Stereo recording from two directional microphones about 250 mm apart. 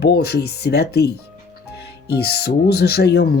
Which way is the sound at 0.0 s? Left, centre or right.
Left.